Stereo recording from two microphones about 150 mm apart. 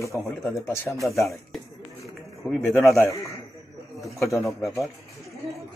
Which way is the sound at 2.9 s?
20° left (ahead or behind).